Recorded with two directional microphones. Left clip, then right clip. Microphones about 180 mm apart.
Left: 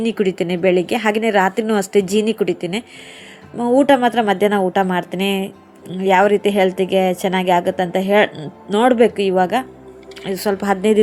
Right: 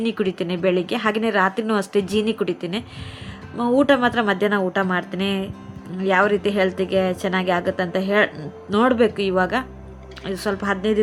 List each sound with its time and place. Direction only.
0.0 s a woman's voice: 15° left (ahead or behind)